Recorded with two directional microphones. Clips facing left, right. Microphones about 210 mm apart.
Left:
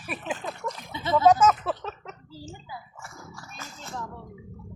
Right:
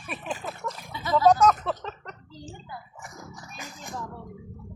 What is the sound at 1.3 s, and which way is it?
Speech, 5° left (ahead or behind).